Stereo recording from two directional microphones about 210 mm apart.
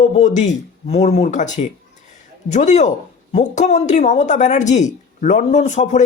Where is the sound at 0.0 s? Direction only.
35° left (ahead or behind).